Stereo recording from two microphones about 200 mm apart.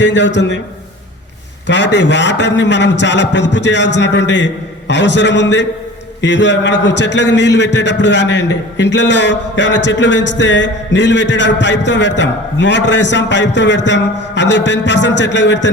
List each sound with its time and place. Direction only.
0.0 s a man's voice: 65° left (ahead or behind)
1.6 s a man's voice: 60° left (ahead or behind)